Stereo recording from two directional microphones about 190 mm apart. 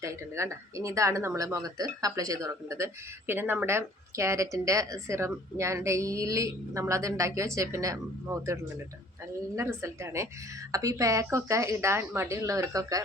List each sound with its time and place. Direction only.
0.0 s speech: 15° right (ahead or behind)
9.6 s speech: 15° right (ahead or behind)